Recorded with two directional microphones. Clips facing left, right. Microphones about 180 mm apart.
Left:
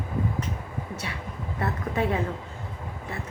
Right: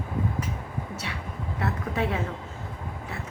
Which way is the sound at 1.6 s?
Centre (ahead or behind).